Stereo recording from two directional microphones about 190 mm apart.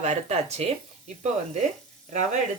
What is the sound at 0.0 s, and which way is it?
Speech, 35° right (ahead or behind).